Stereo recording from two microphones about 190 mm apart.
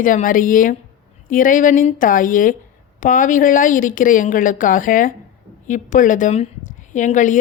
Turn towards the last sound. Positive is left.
turn(degrees=40)  # may be behind; listen again after turning